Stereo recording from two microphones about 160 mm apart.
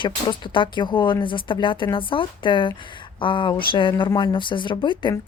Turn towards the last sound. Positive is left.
turn(degrees=30)  # may be behind; listen again after turning